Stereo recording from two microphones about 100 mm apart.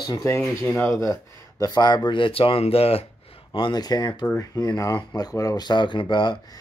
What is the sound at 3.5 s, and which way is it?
Speech, 50° left (ahead or behind).